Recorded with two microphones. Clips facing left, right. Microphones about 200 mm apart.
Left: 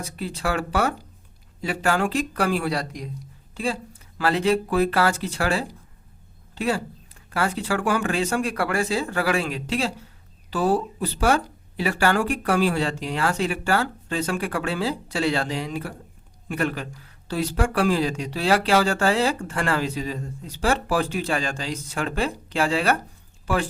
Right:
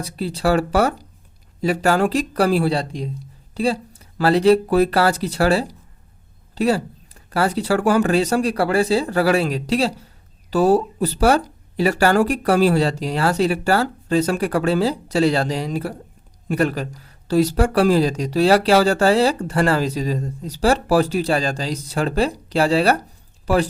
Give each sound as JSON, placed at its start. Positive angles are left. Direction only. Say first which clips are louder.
{"t": 0.0, "sound": "speech", "louder": "right 7 dB", "side_deg": -35}